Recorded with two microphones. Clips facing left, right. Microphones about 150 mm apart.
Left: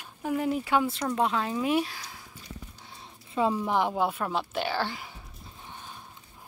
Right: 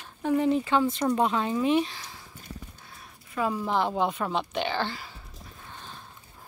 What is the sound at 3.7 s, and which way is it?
Speech, 15° left (ahead or behind).